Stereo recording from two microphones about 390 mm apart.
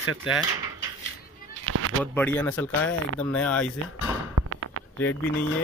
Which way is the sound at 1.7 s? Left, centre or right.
Right.